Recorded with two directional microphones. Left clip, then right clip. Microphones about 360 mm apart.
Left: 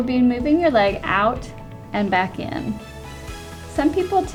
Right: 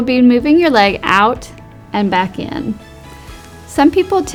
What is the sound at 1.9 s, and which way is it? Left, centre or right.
Speech, right.